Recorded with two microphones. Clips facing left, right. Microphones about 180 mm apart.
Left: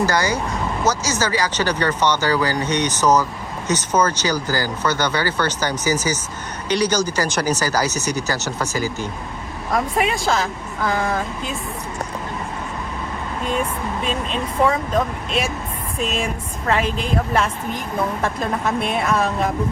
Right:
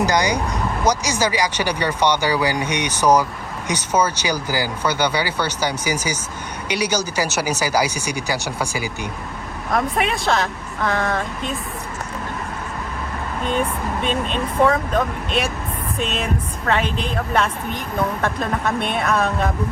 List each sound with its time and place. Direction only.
0.0 s speech: 15° right (ahead or behind)
9.7 s speech: centre (ahead or behind)
13.4 s speech: centre (ahead or behind)